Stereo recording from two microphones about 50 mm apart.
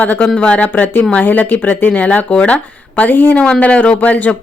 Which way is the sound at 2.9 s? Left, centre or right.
Left.